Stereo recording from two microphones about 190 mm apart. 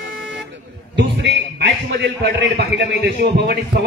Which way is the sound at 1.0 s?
65° right (ahead or behind).